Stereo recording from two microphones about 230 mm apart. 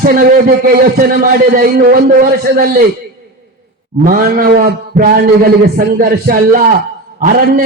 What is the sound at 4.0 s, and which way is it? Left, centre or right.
A man's voice, right.